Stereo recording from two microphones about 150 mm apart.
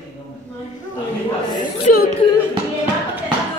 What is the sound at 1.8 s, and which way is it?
Speech, 70° left (ahead or behind).